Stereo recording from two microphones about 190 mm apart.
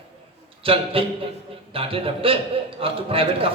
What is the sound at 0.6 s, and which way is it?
A man's voice, 30° right (ahead or behind).